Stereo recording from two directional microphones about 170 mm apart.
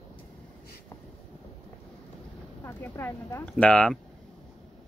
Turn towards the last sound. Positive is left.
turn(degrees=5)  # may be behind; listen again after turning